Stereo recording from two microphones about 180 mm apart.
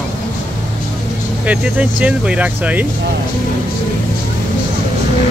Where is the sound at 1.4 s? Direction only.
10° right (ahead or behind).